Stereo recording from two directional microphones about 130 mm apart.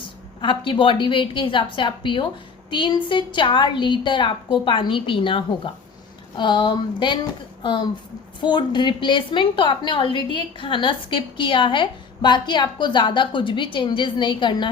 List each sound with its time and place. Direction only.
0.0 s a woman's voice: 40° left (ahead or behind)
8.4 s a woman's voice: 35° left (ahead or behind)